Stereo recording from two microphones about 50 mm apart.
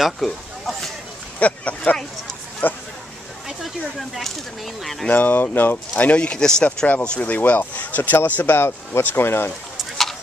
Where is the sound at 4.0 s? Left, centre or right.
Centre.